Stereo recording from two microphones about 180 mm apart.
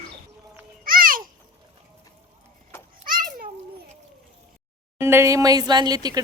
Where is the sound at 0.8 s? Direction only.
50° right (ahead or behind).